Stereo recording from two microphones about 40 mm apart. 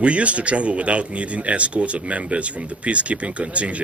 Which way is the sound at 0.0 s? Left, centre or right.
Right.